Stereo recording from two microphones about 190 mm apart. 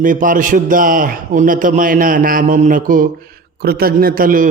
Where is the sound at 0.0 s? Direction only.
45° right (ahead or behind).